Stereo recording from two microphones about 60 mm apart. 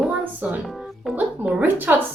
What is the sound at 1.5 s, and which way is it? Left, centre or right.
Speech, right.